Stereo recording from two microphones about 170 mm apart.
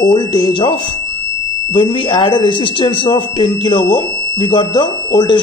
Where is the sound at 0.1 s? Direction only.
25° left (ahead or behind).